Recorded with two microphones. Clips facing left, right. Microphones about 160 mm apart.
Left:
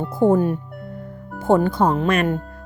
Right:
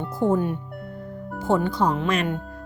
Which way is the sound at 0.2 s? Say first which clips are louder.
Left 5 dB; 50° left (ahead or behind).